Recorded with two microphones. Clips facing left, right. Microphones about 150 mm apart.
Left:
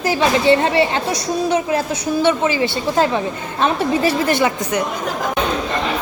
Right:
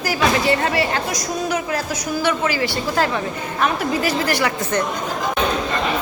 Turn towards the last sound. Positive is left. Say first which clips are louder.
# left 4 dB
turn(degrees=25)  # may be behind; listen again after turning